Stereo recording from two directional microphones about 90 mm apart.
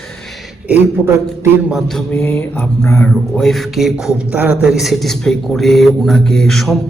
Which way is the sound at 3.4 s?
Centre (ahead or behind).